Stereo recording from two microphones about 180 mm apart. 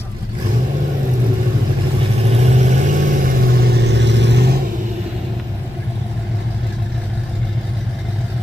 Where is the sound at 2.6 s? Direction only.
45° right (ahead or behind); by 4.5 s 75° right (ahead or behind).